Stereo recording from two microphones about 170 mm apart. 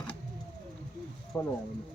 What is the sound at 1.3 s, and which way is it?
Speech, 5° left (ahead or behind).